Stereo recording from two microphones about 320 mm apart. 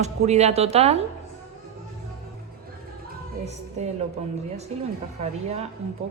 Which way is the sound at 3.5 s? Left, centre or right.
Centre.